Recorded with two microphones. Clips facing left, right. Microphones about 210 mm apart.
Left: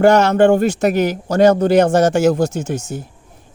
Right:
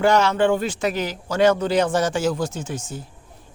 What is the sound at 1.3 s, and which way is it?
Speech, 40° left (ahead or behind).